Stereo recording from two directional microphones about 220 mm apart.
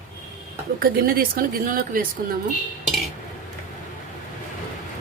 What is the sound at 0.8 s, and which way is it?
Speech, 40° right (ahead or behind).